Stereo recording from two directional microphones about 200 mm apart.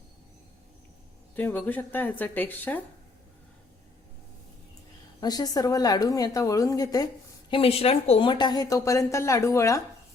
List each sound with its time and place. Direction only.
1.4 s speech: 10° left (ahead or behind)
5.2 s speech: 20° left (ahead or behind)